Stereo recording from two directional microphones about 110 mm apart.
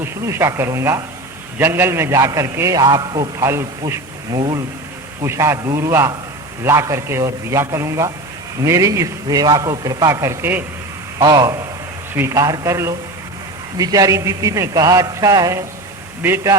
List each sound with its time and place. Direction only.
0.0 s a man's voice: 25° right (ahead or behind)
3.3 s speech: 25° right (ahead or behind)
4.4 s a man's voice: 40° right (ahead or behind)
5.2 s a man's voice: 25° right (ahead or behind)
11.2 s a man's voice: 35° right (ahead or behind)